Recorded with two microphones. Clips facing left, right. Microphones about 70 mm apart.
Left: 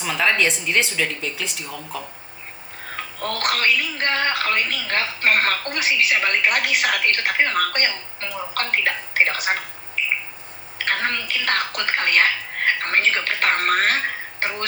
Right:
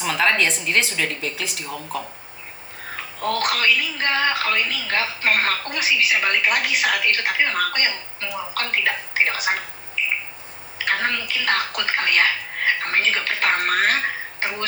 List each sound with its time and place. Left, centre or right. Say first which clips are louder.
0.0 s a woman's voice: even; centre
2.9 s a woman's voice: right 3 dB; left
10.8 s a woman's voice: right 1 dB; left